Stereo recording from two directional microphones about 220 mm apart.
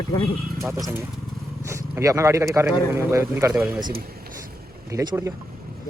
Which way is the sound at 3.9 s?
45° right (ahead or behind).